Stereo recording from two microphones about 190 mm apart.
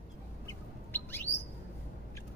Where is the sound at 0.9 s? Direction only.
10° left (ahead or behind).